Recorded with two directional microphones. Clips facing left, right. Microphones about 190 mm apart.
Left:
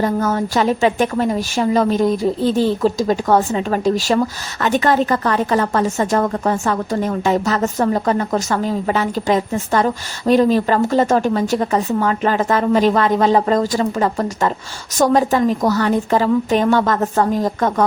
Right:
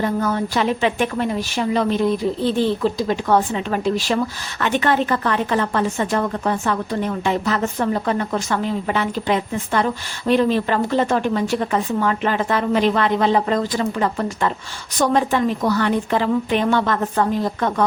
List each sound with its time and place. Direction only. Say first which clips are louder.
0.0 s a woman's voice: left 3 dB; 45° left (ahead or behind)